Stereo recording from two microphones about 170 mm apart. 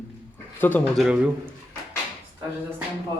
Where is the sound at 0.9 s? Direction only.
5° right (ahead or behind).